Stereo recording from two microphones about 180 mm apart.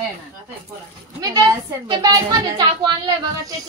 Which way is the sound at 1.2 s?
20° right (ahead or behind).